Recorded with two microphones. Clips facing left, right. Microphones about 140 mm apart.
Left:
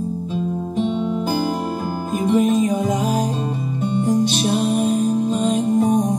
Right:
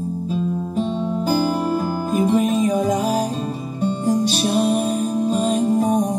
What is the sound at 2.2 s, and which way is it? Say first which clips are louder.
Music: left 2 dB; 35° right (ahead or behind).